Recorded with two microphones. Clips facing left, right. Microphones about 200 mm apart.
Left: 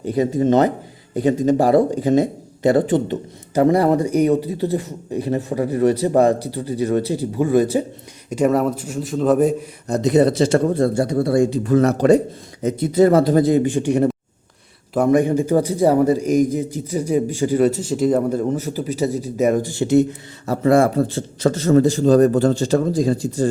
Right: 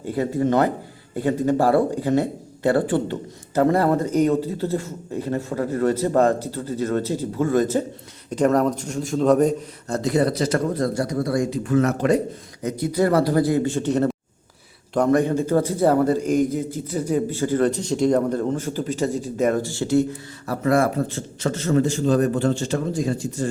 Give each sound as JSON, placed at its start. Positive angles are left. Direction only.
{"t": 0.0, "sound": "a man's voice", "side_deg": 20}
{"t": 9.8, "sound": "a man's voice", "side_deg": 20}